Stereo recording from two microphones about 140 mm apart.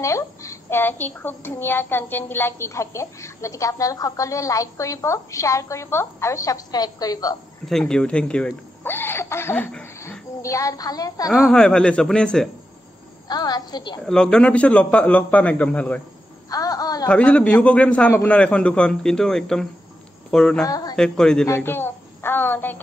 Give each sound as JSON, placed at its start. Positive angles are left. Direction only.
{"t": 0.0, "sound": "a child's voice", "side_deg": 20}
{"t": 7.6, "sound": "a child's voice", "side_deg": 5}
{"t": 11.2, "sound": "a man's voice", "side_deg": 0}
{"t": 13.3, "sound": "a child's voice", "side_deg": 30}
{"t": 14.0, "sound": "speech", "side_deg": 5}
{"t": 16.4, "sound": "a sound", "side_deg": 25}
{"t": 17.1, "sound": "a man's voice", "side_deg": 10}
{"t": 20.6, "sound": "a child's voice", "side_deg": 30}
{"t": 20.9, "sound": "a man's voice", "side_deg": 5}
{"t": 21.5, "sound": "speech", "side_deg": 15}